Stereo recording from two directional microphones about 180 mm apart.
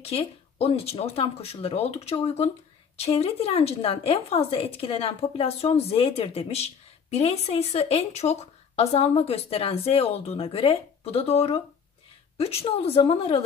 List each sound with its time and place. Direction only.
0.0 s a woman's voice: 35° left (ahead or behind)